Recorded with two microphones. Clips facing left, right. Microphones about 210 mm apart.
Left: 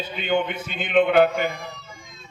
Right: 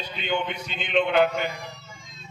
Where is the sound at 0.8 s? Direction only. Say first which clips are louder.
Left 4 dB; 55° left (ahead or behind).